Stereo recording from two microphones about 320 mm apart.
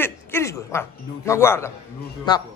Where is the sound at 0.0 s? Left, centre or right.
Centre.